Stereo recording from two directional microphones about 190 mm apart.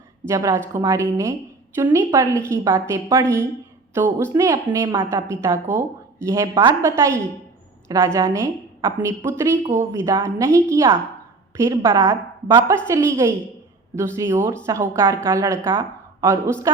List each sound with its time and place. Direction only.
0.3 s a woman's voice: 15° right (ahead or behind)